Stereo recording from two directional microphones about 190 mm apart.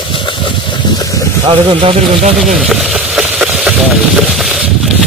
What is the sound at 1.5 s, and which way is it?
Speech, 25° right (ahead or behind).